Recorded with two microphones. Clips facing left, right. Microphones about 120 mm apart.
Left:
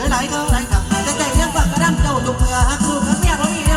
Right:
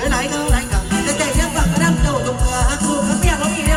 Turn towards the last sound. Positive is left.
turn(degrees=25)  # may be behind; listen again after turning